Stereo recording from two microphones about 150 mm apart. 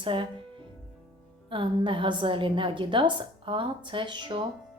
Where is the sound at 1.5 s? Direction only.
35° right (ahead or behind).